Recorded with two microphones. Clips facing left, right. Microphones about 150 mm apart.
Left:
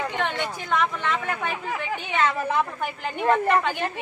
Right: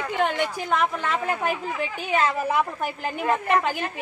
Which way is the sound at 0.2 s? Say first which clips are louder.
Right 4 dB; 10° right (ahead or behind).